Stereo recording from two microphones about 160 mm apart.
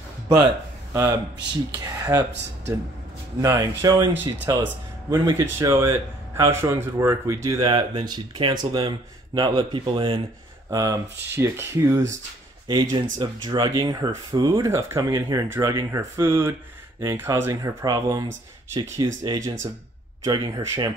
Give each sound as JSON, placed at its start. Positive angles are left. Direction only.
{"t": 0.9, "sound": "a man's voice", "side_deg": -20}
{"t": 10.7, "sound": "speech", "side_deg": -20}
{"t": 12.6, "sound": "a man's voice", "side_deg": -30}